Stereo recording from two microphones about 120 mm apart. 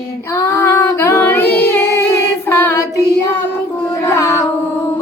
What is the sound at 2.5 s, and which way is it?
Child singing, 25° left (ahead or behind).